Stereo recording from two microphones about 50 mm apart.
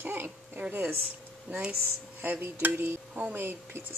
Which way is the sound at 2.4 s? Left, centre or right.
Right.